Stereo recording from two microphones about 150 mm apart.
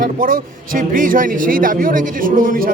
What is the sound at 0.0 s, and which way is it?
Speech, 70° right (ahead or behind).